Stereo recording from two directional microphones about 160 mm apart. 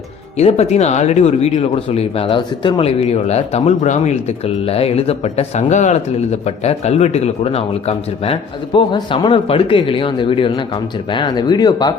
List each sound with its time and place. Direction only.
0.3 s speech: 40° left (ahead or behind); by 11.9 s 25° left (ahead or behind)